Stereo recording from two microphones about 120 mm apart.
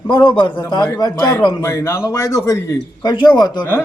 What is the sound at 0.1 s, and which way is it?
Speech, 40° left (ahead or behind).